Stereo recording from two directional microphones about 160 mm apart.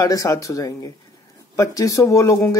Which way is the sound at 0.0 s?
20° left (ahead or behind).